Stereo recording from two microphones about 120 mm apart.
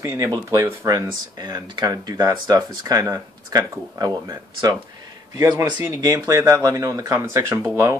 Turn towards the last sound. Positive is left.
turn(degrees=-25)  # may be behind; listen again after turning